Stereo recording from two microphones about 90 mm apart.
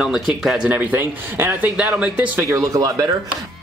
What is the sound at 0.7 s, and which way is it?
Speech, 25° right (ahead or behind).